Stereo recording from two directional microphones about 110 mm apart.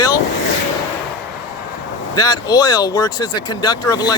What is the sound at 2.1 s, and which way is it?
Speech, 35° left (ahead or behind).